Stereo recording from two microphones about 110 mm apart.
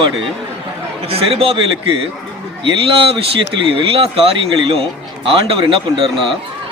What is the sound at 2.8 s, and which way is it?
A man's voice, 55° right (ahead or behind).